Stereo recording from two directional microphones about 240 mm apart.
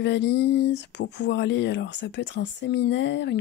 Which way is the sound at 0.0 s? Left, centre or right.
Left.